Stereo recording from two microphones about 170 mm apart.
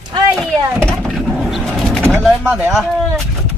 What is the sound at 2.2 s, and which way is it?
Speech, 5° right (ahead or behind).